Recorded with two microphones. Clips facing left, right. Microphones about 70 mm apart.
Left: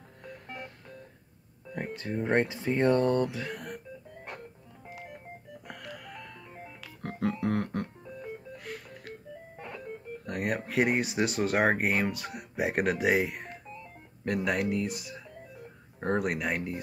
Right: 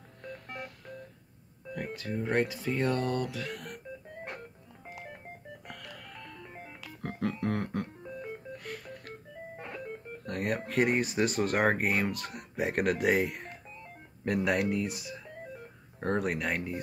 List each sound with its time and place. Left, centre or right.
1.7 s speech: left
5.7 s music: centre
10.2 s speech: centre